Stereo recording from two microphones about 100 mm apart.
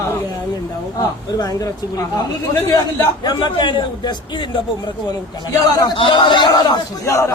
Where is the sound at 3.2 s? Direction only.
45° left (ahead or behind).